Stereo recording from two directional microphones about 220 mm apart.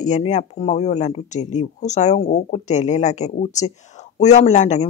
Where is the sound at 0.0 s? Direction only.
30° left (ahead or behind).